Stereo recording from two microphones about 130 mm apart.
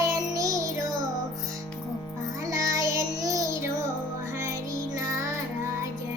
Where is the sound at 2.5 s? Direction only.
25° right (ahead or behind).